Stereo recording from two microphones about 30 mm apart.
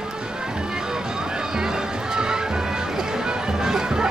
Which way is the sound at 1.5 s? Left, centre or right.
Centre.